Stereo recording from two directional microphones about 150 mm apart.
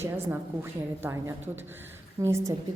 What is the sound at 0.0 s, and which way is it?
A woman's voice, 15° right (ahead or behind).